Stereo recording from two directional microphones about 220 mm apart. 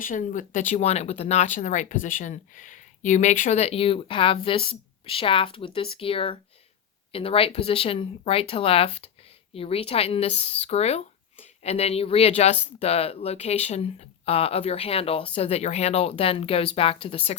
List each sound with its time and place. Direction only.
0.0 s speech: 35° left (ahead or behind)